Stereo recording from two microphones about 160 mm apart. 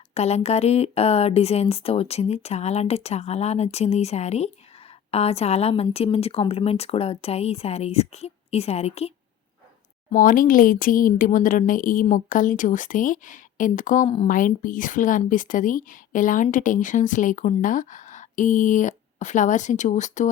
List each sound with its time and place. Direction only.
0.1 s speech: 40° left (ahead or behind)
10.1 s speech: 60° left (ahead or behind)